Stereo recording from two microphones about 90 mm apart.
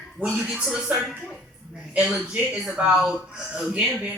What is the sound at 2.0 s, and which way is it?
Speech, 5° right (ahead or behind).